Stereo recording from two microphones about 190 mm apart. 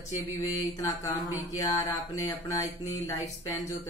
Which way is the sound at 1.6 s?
20° left (ahead or behind).